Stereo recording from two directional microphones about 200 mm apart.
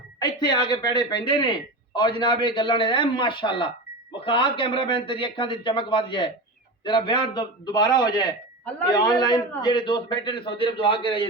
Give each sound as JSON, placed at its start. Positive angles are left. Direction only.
{"t": 0.2, "sound": "speech", "side_deg": 20}